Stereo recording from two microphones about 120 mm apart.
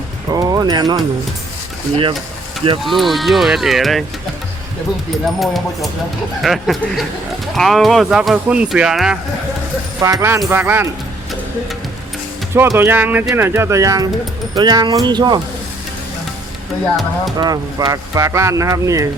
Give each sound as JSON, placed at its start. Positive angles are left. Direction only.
{"t": 0.3, "sound": "a sound", "side_deg": -30}
{"t": 2.8, "sound": "speech", "side_deg": 0}
{"t": 5.2, "sound": "speech", "side_deg": 0}
{"t": 10.0, "sound": "speech", "side_deg": -25}
{"t": 12.5, "sound": "speech", "side_deg": -20}
{"t": 17.3, "sound": "speech", "side_deg": -35}